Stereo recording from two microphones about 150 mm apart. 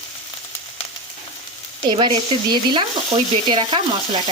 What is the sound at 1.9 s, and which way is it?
Stir, 35° right (ahead or behind).